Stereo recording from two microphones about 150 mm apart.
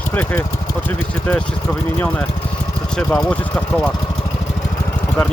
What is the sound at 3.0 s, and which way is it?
Speech, 10° left (ahead or behind).